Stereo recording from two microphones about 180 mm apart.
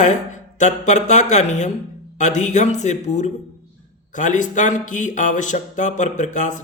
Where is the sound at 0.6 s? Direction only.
40° left (ahead or behind).